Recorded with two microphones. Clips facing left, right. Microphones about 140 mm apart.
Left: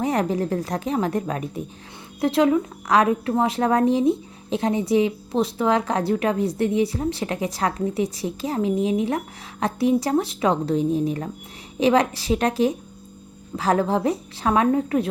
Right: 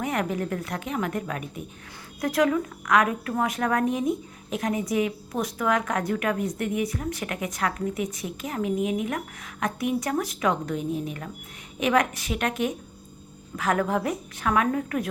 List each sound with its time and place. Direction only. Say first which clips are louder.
0.0 s a woman's voice: left 5 dB; 30° left (ahead or behind)